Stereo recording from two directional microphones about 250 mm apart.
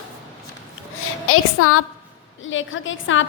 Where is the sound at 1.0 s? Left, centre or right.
Left.